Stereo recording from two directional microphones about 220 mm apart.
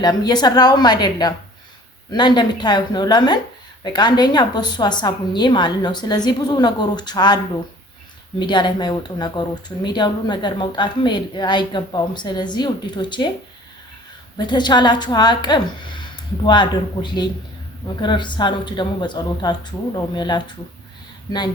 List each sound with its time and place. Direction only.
0.0 s speech: 20° left (ahead or behind)
8.4 s speech: 20° left (ahead or behind)
14.3 s speech: 20° left (ahead or behind)